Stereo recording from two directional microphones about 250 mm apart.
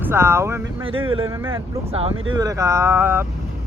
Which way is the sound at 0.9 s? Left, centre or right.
Right.